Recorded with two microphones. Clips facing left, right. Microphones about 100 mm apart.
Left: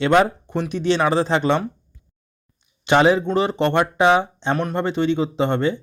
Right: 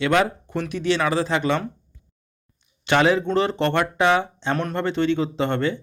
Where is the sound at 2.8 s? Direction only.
20° left (ahead or behind).